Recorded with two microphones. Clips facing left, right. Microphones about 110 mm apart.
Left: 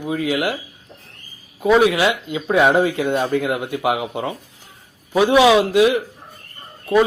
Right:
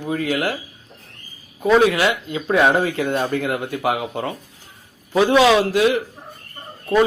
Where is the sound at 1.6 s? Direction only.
10° left (ahead or behind).